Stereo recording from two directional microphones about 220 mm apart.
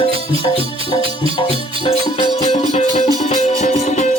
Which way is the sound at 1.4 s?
25° left (ahead or behind).